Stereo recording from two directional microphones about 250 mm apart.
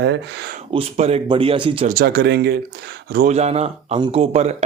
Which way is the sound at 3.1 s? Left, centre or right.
Right.